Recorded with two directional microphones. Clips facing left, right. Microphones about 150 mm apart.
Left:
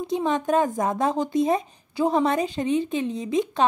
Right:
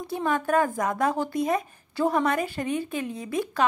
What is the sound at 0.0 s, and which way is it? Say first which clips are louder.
A woman's voice: left 3 dB; 20° left (ahead or behind).